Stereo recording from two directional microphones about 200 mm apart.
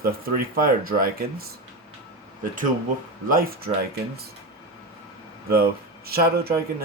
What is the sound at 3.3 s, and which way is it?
Speech, 45° right (ahead or behind).